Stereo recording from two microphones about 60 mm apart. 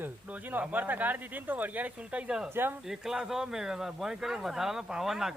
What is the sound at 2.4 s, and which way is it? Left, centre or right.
Speech, right.